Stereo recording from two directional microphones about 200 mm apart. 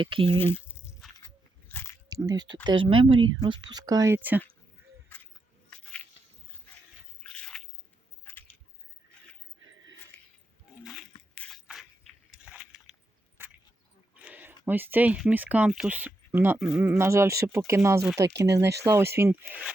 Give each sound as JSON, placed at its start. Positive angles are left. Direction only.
{"t": 0.0, "sound": "speech", "side_deg": -25}
{"t": 0.3, "sound": "speech", "side_deg": 10}
{"t": 1.7, "sound": "biting", "side_deg": 10}
{"t": 2.0, "sound": "speech", "side_deg": -20}
{"t": 5.0, "sound": "a sound", "side_deg": 10}
{"t": 7.3, "sound": "drip", "side_deg": 5}
{"t": 8.2, "sound": "keys jangling", "side_deg": 10}
{"t": 10.1, "sound": "a sound", "side_deg": 10}
{"t": 10.8, "sound": "a sound", "side_deg": 0}
{"t": 11.3, "sound": "biting", "side_deg": 5}
{"t": 13.4, "sound": "a sound", "side_deg": -10}
{"t": 14.2, "sound": "speech", "side_deg": -10}